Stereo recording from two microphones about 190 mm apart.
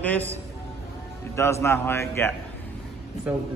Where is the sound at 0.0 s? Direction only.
10° left (ahead or behind).